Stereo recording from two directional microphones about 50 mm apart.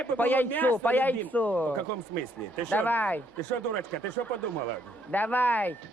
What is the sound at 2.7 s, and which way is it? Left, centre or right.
Speech, left.